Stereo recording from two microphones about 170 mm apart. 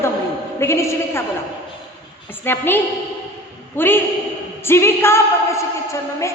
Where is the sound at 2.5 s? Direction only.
10° left (ahead or behind).